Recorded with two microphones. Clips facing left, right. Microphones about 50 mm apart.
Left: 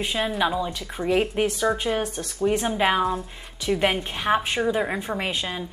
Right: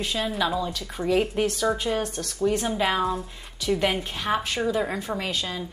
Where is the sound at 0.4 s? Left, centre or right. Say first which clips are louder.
Left 2 dB; left.